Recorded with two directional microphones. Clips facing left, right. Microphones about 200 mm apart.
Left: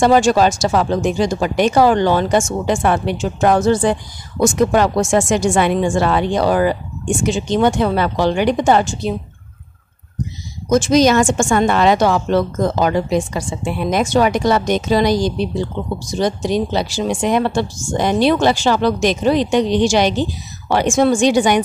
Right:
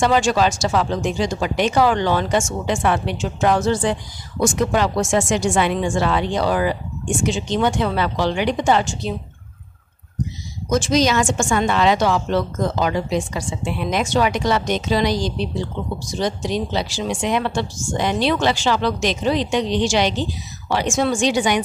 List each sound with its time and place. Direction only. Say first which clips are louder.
0.0 s speech: left 5 dB; 45° left (ahead or behind)
10.7 s speech: left 5 dB; 50° left (ahead or behind)